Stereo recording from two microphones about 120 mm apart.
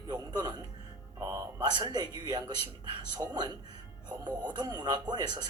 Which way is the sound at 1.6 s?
35° right (ahead or behind).